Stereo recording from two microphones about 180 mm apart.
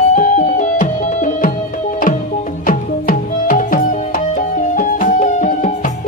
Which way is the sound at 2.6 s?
50° left (ahead or behind).